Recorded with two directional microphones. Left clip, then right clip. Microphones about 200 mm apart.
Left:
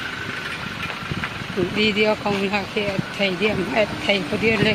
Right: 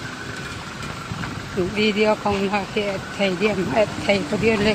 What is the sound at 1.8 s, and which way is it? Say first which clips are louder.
Speech: left 1 dB; 40° right (ahead or behind).